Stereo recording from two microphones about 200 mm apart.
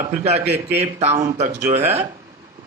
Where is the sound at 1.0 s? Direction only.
35° right (ahead or behind).